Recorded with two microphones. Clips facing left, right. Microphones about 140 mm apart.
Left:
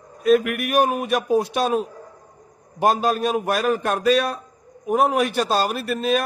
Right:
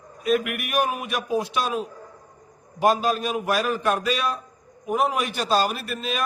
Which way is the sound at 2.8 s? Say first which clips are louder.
Left 2 dB; 45° left (ahead or behind).